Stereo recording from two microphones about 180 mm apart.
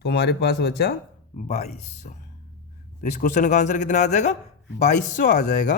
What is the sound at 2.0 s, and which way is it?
A woman's voice, 45° left (ahead or behind).